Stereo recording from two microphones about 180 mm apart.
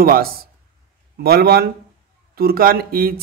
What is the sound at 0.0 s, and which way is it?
Speech, 55° right (ahead or behind).